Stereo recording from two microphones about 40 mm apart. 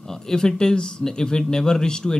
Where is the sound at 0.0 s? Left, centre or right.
Centre.